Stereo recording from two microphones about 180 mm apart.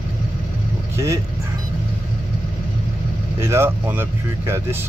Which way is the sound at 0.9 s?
15° right (ahead or behind).